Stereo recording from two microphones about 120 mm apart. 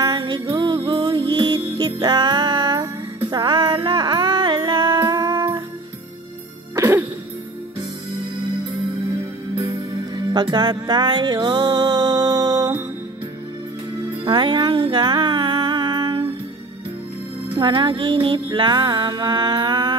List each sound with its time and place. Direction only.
0.0 s music: 35° right (ahead or behind)
4.9 s music: 30° right (ahead or behind)
6.7 s music: 20° right (ahead or behind)
10.3 s music: 40° right (ahead or behind)
14.2 s humming: 40° right (ahead or behind)
17.6 s music: 40° right (ahead or behind)